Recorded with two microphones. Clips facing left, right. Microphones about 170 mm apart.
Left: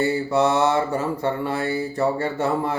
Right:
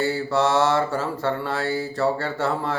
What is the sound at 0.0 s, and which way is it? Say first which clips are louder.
Mantra: left 2 dB; 15° left (ahead or behind).